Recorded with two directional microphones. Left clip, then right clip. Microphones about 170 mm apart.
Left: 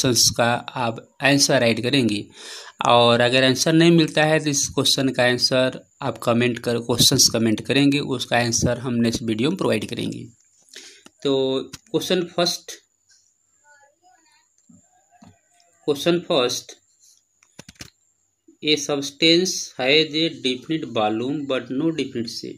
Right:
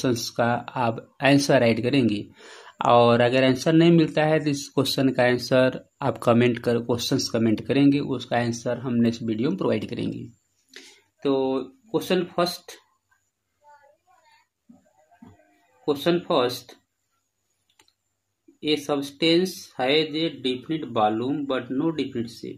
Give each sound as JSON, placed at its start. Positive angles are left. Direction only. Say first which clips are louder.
{"t": 0.0, "sound": "speech", "louder": "left 5 dB", "side_deg": 10}
{"t": 11.1, "sound": "speech", "louder": "left 3 dB", "side_deg": 20}
{"t": 15.8, "sound": "speech", "louder": "left 2 dB", "side_deg": 20}
{"t": 18.6, "sound": "speech", "louder": "left 3 dB", "side_deg": 15}